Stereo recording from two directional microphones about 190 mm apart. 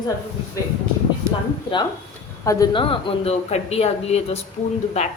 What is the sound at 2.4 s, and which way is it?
Speech, 25° left (ahead or behind).